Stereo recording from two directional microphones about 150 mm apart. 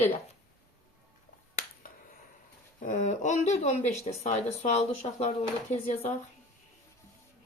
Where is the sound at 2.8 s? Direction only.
60° left (ahead or behind).